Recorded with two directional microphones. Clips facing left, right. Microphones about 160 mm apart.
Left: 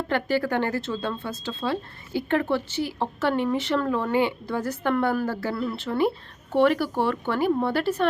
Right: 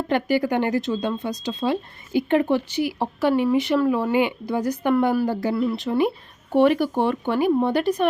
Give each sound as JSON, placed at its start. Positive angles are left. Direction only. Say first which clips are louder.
{"t": 0.1, "sound": "speech", "louder": "right 4 dB", "side_deg": -15}